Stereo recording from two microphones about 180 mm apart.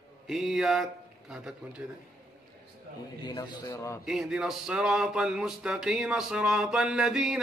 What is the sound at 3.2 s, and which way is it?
Speech, 25° left (ahead or behind).